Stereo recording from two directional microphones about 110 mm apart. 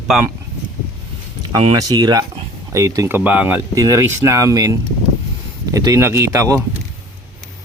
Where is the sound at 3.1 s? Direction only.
15° right (ahead or behind).